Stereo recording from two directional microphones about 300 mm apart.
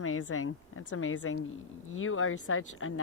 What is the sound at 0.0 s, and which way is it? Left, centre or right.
Speech, left.